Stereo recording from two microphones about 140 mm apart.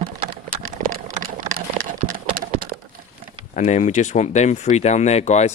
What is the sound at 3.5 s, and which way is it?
Speech, 55° left (ahead or behind).